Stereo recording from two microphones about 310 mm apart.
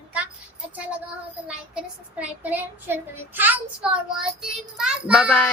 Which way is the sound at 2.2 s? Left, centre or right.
Centre.